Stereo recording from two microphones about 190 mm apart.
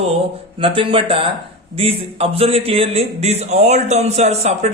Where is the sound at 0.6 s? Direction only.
25° right (ahead or behind).